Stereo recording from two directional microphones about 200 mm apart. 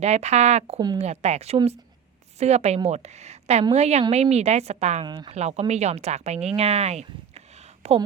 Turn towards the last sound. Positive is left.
turn(degrees=-35)  # may be behind; listen again after turning